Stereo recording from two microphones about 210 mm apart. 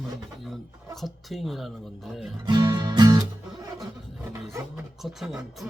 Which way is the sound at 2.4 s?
20° right (ahead or behind).